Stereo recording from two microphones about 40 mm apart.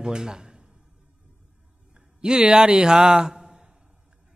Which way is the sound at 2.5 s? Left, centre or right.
Right.